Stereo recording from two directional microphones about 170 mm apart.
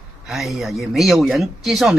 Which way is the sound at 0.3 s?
Centre (ahead or behind).